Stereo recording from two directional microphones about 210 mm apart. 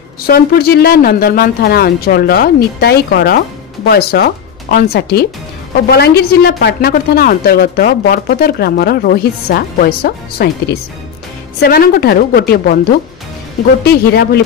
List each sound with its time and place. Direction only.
0.3 s a woman's voice: 45° left (ahead or behind)
13.8 s a woman's voice: 50° left (ahead or behind)